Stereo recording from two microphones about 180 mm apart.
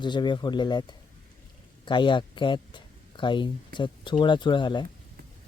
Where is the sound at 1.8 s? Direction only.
25° left (ahead or behind).